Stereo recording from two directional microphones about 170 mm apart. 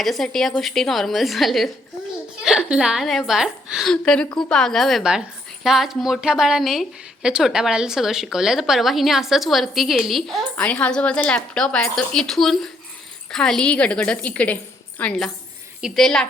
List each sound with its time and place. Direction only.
0.0 s a woman's voice: centre (ahead or behind)